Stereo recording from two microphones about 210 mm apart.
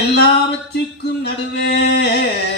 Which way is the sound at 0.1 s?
50° left (ahead or behind).